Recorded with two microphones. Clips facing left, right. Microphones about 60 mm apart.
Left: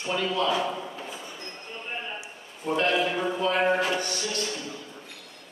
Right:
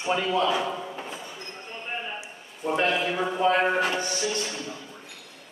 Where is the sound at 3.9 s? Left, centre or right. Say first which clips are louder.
Right 1 dB; centre.